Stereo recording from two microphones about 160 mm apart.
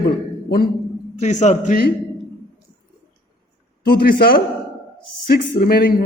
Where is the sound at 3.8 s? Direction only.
80° left.